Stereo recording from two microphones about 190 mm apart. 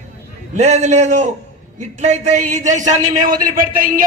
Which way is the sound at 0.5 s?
35° right (ahead or behind).